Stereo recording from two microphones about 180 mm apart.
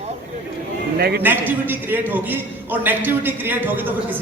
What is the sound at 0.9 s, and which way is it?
Speech, 60° right (ahead or behind).